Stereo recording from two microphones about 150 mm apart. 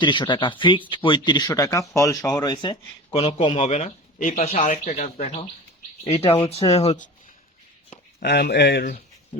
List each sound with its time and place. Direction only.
0.0 s speech: 30° left (ahead or behind); by 7.1 s 50° left (ahead or behind)
8.2 s speech: 90° left